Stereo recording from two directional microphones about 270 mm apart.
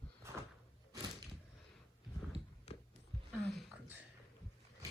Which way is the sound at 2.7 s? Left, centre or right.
Left.